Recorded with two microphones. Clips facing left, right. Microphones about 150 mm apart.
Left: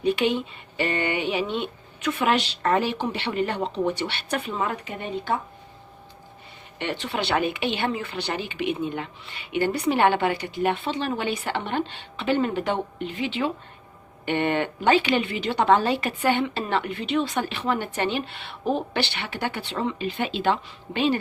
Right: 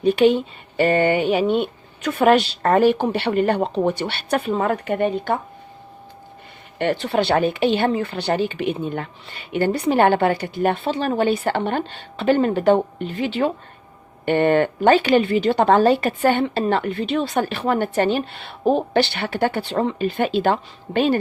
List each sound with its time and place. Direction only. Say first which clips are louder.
0.0 s speech: right 7 dB; 40° right (ahead or behind)
4.9 s speech: right 7 dB; 60° right (ahead or behind)
6.7 s speech: right 8 dB; 45° right (ahead or behind)